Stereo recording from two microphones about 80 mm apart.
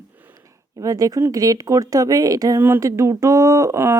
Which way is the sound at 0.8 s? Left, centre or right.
Right.